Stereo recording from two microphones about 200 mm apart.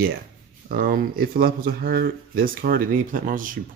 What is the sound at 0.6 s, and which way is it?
Speech, 45° right (ahead or behind).